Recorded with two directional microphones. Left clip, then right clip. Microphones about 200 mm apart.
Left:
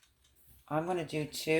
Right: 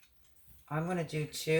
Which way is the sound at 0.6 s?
30° left (ahead or behind).